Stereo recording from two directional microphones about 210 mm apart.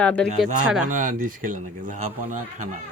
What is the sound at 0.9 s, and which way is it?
Speech, 40° right (ahead or behind).